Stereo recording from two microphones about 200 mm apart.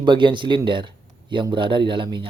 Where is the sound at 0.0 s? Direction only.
25° right (ahead or behind).